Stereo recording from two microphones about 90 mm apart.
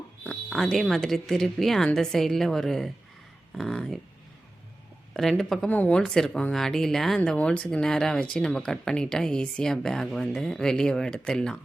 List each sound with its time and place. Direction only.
0.3 s speech: 5° left (ahead or behind)
5.1 s speech: 5° left (ahead or behind)
5.7 s speech: 20° left (ahead or behind)
6.1 s speech: 5° left (ahead or behind)